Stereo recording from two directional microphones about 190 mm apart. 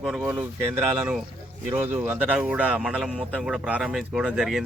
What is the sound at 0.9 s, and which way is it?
Speech, 15° right (ahead or behind).